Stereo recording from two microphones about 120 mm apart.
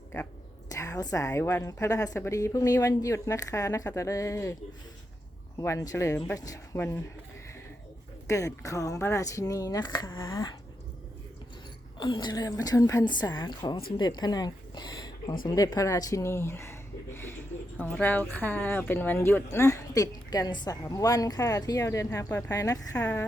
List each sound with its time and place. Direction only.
0.7 s speech: 30° left (ahead or behind)
5.5 s speech: 25° left (ahead or behind)
6.7 s a woman's voice: 15° left (ahead or behind)
8.3 s speech: 25° left (ahead or behind)
10.1 s speech: 25° left (ahead or behind)
11.9 s a woman's voice: 40° left (ahead or behind)
23.0 s a woman's voice: 10° left (ahead or behind)